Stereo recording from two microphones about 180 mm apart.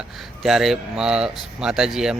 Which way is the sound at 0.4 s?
Centre (ahead or behind).